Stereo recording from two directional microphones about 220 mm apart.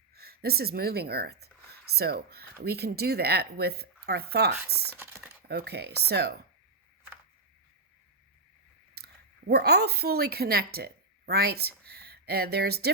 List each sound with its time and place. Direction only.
0.1 s a woman's voice: 45° right (ahead or behind)
4.9 s typing: 10° right (ahead or behind)
5.5 s a woman's voice: 45° right (ahead or behind)
9.0 s chewing: 45° right (ahead or behind)
9.5 s a woman's voice: 45° right (ahead or behind)